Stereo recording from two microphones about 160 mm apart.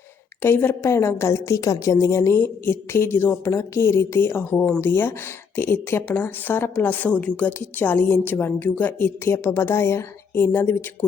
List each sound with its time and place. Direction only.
0.4 s a woman's voice: 15° left (ahead or behind)